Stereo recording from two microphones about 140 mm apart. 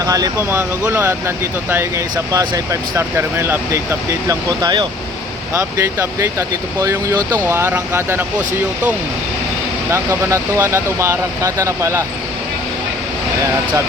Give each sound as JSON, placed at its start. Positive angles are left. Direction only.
{"t": 0.0, "sound": "speech", "side_deg": -25}
{"t": 2.9, "sound": "speech", "side_deg": -15}
{"t": 5.5, "sound": "speech", "side_deg": -20}
{"t": 7.2, "sound": "speech", "side_deg": 10}
{"t": 7.4, "sound": "speech", "side_deg": -20}
{"t": 9.9, "sound": "speech", "side_deg": -20}